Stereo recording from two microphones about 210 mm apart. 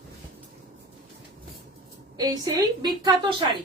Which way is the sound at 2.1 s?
20° right (ahead or behind).